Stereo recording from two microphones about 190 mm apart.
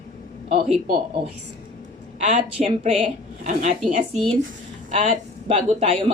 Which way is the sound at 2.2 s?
40° right (ahead or behind).